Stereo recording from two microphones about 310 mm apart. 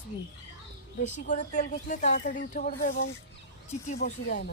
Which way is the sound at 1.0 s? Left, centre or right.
Left.